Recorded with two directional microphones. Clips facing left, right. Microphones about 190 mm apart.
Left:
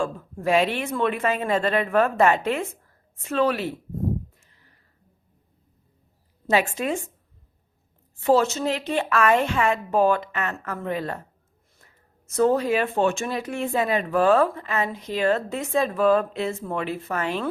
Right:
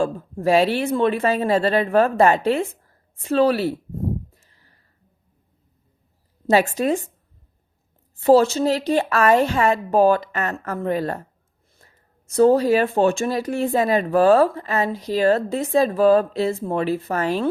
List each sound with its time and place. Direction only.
0.0 s speech: 35° right (ahead or behind)
4.4 s a sound: 35° right (ahead or behind)
6.5 s speech: 40° right (ahead or behind)
8.2 s speech: 35° right (ahead or behind)
12.3 s speech: 35° right (ahead or behind)